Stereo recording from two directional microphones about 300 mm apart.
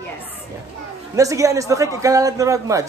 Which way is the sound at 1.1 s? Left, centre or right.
Centre.